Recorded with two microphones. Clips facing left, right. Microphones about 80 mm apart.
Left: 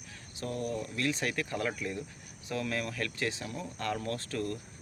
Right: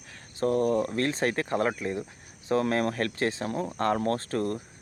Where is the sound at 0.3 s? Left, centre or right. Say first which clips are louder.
Right 11 dB; right.